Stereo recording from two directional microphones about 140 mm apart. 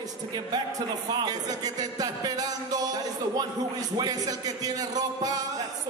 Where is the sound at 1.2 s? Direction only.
25° right (ahead or behind).